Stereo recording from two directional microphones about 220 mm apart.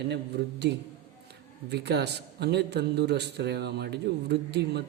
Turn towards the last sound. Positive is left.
turn(degrees=-50)  # may be behind; listen again after turning